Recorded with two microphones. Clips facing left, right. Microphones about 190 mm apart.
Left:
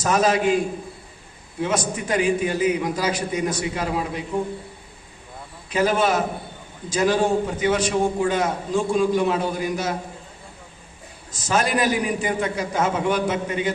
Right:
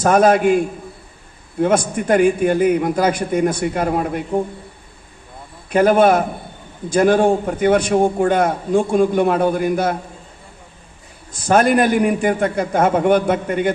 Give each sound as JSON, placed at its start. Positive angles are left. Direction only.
{"t": 0.0, "sound": "a man's voice", "side_deg": -55}
{"t": 5.7, "sound": "a man's voice", "side_deg": -55}
{"t": 11.3, "sound": "a man's voice", "side_deg": -55}